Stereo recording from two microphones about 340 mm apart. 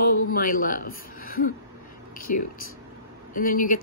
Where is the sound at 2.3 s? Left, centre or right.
Left.